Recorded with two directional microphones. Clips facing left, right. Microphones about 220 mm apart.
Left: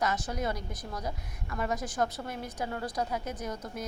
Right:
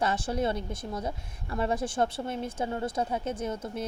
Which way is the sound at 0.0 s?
30° right (ahead or behind).